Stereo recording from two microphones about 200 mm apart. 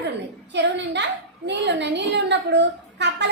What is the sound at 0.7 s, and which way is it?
A woman's voice, 60° right (ahead or behind).